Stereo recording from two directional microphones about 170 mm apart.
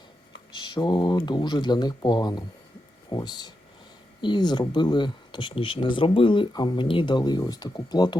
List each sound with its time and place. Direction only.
0.5 s speech: 25° left (ahead or behind)